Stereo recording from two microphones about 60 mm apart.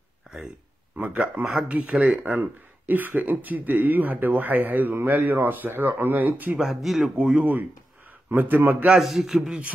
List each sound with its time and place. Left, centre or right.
0.3 s a sound: centre
0.9 s speech: right
2.9 s speech: right
6.6 s a man's voice: centre
7.0 s speech: centre
8.9 s a man's voice: centre